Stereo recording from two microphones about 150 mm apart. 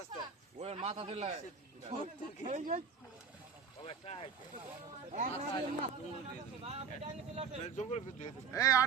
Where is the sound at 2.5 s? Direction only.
55° right (ahead or behind).